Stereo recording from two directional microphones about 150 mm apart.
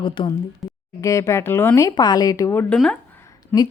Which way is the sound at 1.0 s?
20° left (ahead or behind).